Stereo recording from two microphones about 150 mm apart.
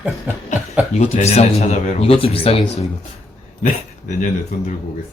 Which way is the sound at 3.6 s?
55° left (ahead or behind).